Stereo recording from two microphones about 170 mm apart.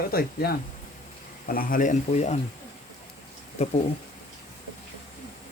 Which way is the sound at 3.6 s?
40° left (ahead or behind).